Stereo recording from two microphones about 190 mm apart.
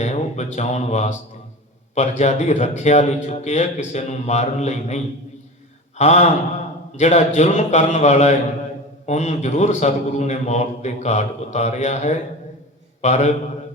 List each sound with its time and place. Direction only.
0.0 s a man's voice: 35° left (ahead or behind)